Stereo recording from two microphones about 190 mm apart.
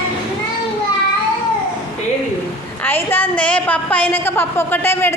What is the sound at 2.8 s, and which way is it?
A woman's voice, 10° left (ahead or behind).